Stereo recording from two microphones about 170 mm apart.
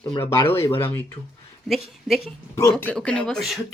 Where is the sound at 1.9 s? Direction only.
Centre (ahead or behind).